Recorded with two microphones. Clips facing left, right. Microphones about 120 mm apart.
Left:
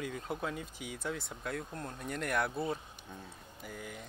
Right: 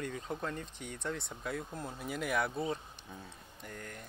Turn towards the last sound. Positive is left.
turn(degrees=5)  # may be behind; listen again after turning